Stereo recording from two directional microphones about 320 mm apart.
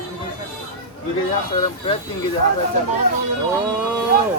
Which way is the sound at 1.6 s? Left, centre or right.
Centre.